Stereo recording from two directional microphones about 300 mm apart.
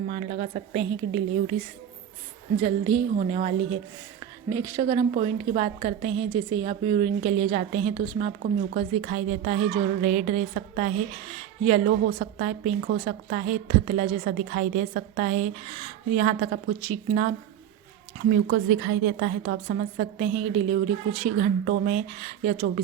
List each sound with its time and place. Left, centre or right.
0.1 s a woman's voice: right
2.6 s a woman's voice: centre
8.4 s a woman's voice: right
11.9 s a woman's voice: right
18.3 s a woman's voice: right